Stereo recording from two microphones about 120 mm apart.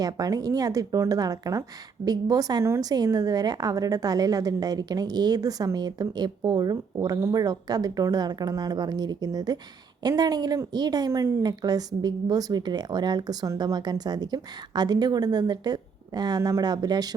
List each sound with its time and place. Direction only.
0.0 s a woman's voice: 30° right (ahead or behind)